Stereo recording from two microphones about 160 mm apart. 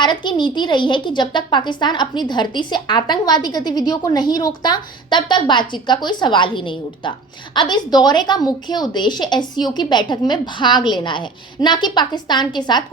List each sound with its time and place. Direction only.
0.0 s a woman's voice: 30° left (ahead or behind)